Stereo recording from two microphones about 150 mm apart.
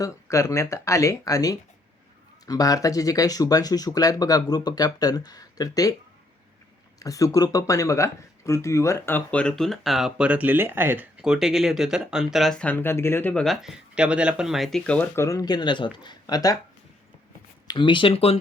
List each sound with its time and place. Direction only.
0.0 s speech: 20° left (ahead or behind)
7.0 s speech: 20° left (ahead or behind)
13.4 s speech: centre (ahead or behind); by 16.6 s 25° left (ahead or behind)
17.7 s speech: 30° left (ahead or behind)